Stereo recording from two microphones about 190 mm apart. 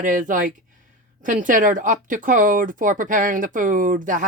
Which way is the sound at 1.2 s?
45° right (ahead or behind).